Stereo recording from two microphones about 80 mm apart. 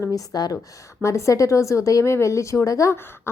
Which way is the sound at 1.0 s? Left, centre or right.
Left.